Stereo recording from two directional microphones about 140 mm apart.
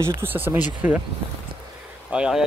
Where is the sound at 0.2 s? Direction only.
15° right (ahead or behind).